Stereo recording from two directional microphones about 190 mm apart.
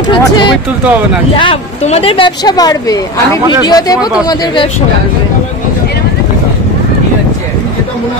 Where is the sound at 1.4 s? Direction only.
30° left (ahead or behind).